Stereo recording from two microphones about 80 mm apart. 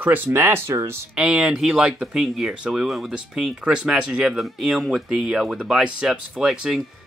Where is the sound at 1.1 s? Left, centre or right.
Centre.